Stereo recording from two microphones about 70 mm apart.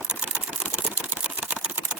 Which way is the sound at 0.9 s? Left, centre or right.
Centre.